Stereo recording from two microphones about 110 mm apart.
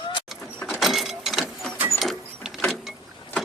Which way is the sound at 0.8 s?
Centre (ahead or behind).